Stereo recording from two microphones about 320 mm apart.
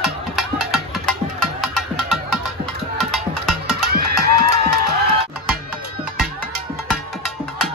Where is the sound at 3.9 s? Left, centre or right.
Right.